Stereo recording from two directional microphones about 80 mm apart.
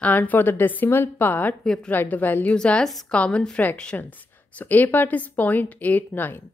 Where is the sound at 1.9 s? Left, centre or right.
Left.